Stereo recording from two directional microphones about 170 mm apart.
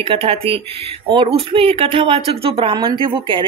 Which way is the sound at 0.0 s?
35° right (ahead or behind).